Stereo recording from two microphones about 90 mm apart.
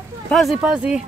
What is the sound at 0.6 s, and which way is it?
Speech, 10° right (ahead or behind).